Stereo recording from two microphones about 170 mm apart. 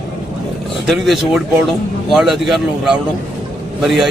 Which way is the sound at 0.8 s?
Centre (ahead or behind).